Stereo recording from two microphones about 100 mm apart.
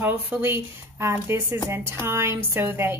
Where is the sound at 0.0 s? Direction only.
20° right (ahead or behind).